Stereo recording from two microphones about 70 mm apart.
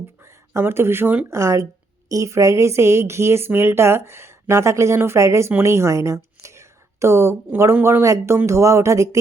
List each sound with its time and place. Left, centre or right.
0.5 s speech: right